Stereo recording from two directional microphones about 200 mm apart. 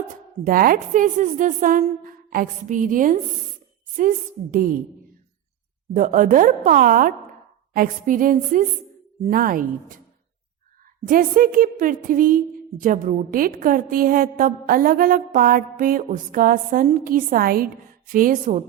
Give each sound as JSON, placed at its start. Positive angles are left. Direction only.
{"t": 0.1, "sound": "a woman's voice", "side_deg": -45}
{"t": 4.5, "sound": "a woman's voice", "side_deg": -45}
{"t": 5.9, "sound": "a woman's voice", "side_deg": -40}
{"t": 11.0, "sound": "a woman's voice", "side_deg": -45}